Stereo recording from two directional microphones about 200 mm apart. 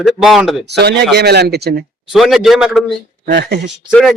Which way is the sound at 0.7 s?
55° right (ahead or behind).